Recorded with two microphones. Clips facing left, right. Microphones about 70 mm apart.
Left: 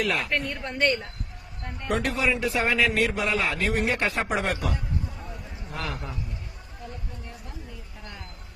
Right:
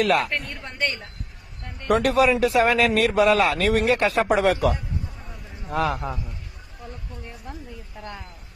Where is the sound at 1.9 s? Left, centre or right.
Right.